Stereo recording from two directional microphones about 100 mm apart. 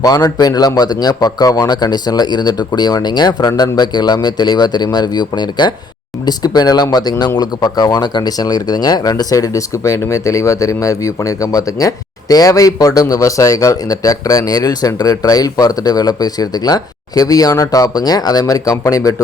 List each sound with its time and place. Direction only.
0.0 s a man's voice: 40° left (ahead or behind)